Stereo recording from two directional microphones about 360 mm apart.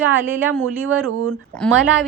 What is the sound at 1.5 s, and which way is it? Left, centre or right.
Speech, centre.